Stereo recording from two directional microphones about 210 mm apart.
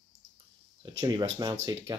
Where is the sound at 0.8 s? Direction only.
20° right (ahead or behind).